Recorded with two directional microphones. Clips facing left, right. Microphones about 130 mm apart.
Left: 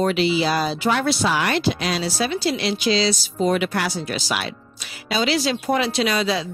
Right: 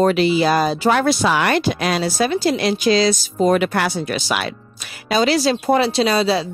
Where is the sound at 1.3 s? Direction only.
60° right (ahead or behind).